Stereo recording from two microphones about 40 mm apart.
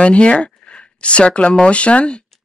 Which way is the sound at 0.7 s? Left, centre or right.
Left.